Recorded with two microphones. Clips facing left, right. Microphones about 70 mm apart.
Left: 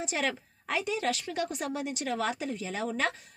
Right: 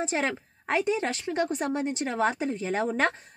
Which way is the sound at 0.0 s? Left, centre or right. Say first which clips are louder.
Right 4 dB; right.